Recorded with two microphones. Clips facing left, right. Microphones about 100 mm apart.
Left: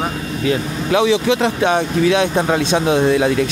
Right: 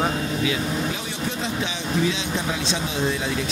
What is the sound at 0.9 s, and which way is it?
Speech, 85° left.